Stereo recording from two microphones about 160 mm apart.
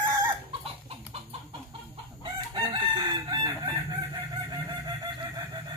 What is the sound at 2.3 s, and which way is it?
Chicken, 25° right (ahead or behind).